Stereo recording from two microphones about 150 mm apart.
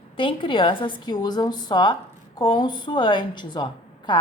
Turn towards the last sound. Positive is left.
turn(degrees=30)  # may be behind; listen again after turning